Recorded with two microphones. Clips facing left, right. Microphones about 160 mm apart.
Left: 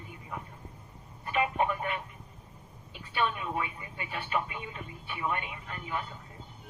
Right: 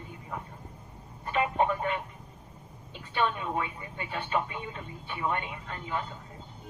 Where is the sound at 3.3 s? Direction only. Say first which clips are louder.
Right 2 dB; 30° right (ahead or behind).